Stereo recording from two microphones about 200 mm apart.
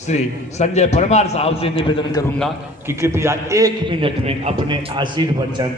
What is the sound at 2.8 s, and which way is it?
A man's voice, 10° right (ahead or behind).